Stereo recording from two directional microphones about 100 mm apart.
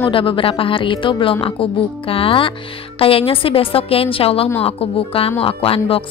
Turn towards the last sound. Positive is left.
turn(degrees=65)  # may be behind; listen again after turning